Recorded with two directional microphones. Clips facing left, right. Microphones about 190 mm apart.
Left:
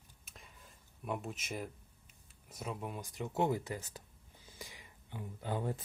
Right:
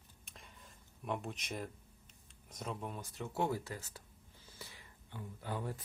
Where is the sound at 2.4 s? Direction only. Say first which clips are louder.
Left 1 dB; 5° left (ahead or behind).